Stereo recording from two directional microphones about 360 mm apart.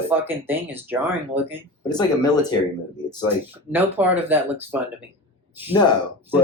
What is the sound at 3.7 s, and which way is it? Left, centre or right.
Speech, centre.